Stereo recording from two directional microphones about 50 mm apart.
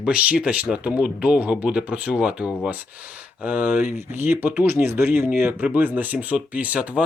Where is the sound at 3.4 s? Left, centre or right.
Right.